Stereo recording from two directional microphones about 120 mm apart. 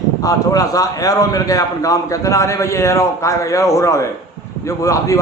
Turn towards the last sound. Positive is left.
turn(degrees=25)  # may be behind; listen again after turning